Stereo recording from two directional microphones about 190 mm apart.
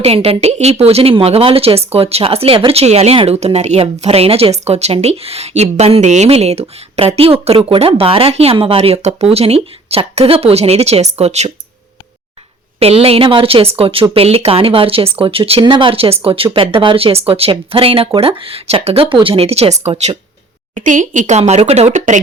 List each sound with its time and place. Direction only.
0.0 s speech: 35° right (ahead or behind)
12.8 s speech: 30° right (ahead or behind)